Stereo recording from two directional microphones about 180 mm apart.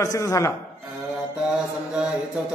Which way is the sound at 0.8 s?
5° right (ahead or behind).